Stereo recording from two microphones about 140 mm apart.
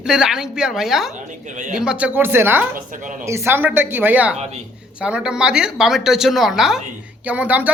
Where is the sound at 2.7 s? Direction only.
70° right (ahead or behind).